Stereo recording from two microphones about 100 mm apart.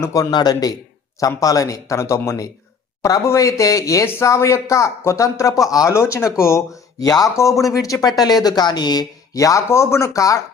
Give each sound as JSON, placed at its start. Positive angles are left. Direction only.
{"t": 0.0, "sound": "speech", "side_deg": 35}